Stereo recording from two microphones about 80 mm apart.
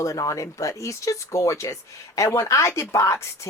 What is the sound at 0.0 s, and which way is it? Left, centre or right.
A woman's voice, left.